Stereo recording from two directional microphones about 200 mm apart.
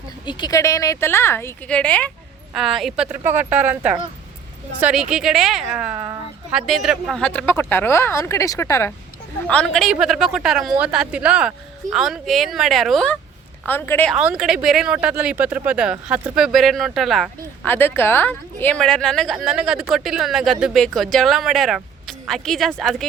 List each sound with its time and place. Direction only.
0.3 s speech: 20° left (ahead or behind)
9.5 s speech: 5° left (ahead or behind)
14.2 s speech: 5° right (ahead or behind)